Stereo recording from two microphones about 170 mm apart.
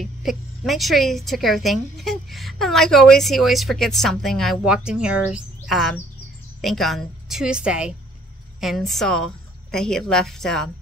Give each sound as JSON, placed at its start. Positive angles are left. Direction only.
{"t": 0.0, "sound": "a woman's voice", "side_deg": 0}